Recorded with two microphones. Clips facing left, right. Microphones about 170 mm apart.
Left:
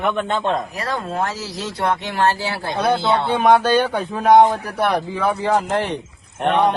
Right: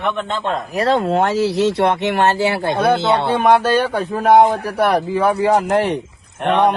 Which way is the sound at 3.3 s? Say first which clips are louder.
Left 1 dB; centre (ahead or behind).